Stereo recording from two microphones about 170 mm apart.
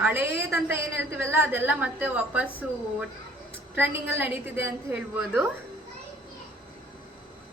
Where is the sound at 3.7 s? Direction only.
10° right (ahead or behind).